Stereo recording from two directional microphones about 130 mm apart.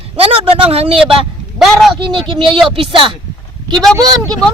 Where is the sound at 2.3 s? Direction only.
40° right (ahead or behind).